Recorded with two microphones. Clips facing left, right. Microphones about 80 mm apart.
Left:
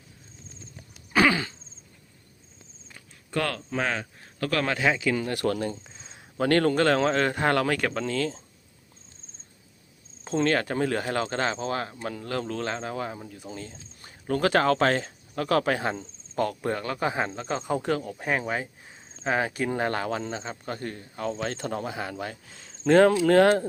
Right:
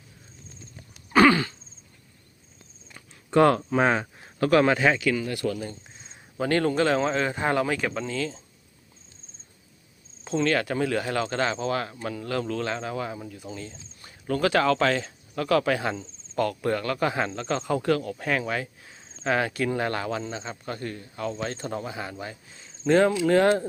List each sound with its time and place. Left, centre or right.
1.1 s throat clearing: centre
3.2 s a man's voice: right
4.6 s speech: centre
5.1 s speech: left
5.4 s speech: left
6.4 s speech: left
10.2 s speech: left; by 17.7 s centre
17.7 s speech: left